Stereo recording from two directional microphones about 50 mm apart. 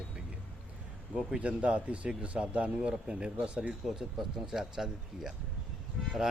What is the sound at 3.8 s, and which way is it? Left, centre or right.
Speech, centre.